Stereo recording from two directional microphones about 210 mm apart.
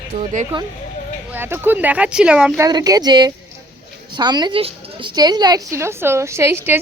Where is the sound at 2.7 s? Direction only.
20° right (ahead or behind).